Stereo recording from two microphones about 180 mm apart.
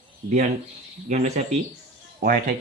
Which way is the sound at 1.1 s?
40° right (ahead or behind).